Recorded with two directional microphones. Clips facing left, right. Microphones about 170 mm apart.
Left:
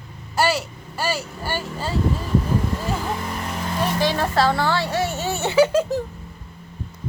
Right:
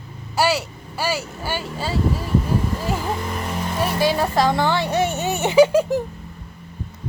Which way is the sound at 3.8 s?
10° right (ahead or behind).